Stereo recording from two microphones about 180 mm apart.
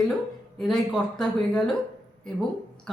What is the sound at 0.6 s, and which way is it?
Speech, centre (ahead or behind).